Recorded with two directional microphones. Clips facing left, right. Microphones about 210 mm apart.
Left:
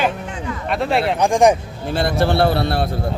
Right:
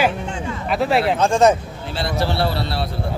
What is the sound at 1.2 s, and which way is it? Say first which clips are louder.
Speech: left 2 dB; 15° left (ahead or behind).